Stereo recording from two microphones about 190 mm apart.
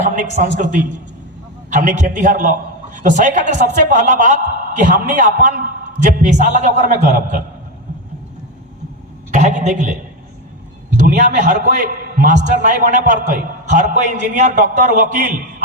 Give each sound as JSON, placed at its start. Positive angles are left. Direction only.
{"t": 0.0, "sound": "a man's voice", "side_deg": -40}
{"t": 9.3, "sound": "a man's voice", "side_deg": -40}